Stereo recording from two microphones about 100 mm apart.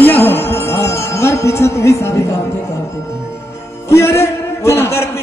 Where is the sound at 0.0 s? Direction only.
20° left (ahead or behind).